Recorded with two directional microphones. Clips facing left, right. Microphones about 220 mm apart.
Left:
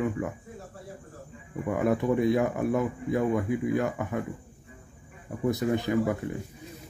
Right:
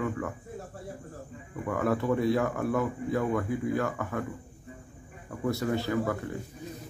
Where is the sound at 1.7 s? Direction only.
15° left (ahead or behind).